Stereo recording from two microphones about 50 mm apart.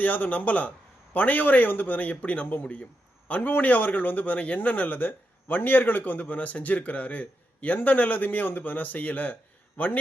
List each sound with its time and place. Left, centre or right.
0.0 s a man's voice: left